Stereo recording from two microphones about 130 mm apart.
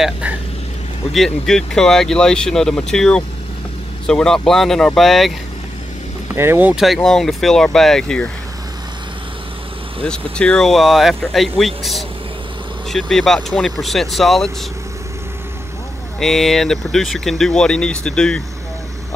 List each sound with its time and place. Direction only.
0.0 s speech: 10° right (ahead or behind)
1.1 s speech: centre (ahead or behind)
6.3 s speech: 20° right (ahead or behind)
6.7 s speech: centre (ahead or behind)
10.0 s speech: 5° left (ahead or behind)
16.2 s speech: centre (ahead or behind)